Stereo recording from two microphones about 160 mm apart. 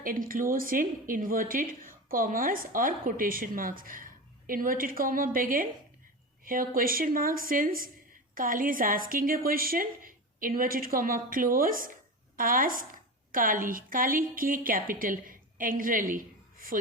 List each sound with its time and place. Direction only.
0.0 s a woman's voice: 60° right (ahead or behind)